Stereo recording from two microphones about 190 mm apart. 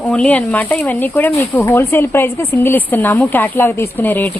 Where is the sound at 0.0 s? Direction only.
5° left (ahead or behind).